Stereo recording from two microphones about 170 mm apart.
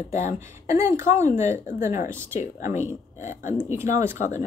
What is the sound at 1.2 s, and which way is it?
Speech, 45° left (ahead or behind).